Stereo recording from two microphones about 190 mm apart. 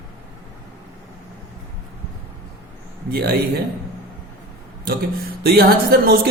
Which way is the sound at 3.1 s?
55° right (ahead or behind).